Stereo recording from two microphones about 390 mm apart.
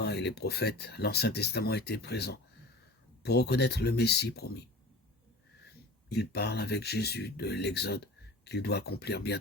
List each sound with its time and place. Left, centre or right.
0.0 s speech: left
5.6 s speech: left